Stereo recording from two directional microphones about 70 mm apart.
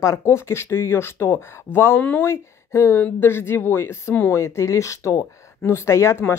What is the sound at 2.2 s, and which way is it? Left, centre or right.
Speech, left.